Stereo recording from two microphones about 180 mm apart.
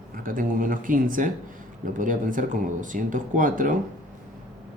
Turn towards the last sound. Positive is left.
turn(degrees=-45)  # may be behind; listen again after turning